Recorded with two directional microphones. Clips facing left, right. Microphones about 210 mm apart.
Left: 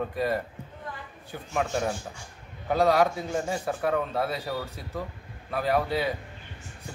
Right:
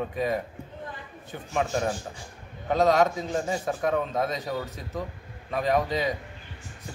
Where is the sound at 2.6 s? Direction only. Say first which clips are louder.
Right 1 dB; 10° left (ahead or behind).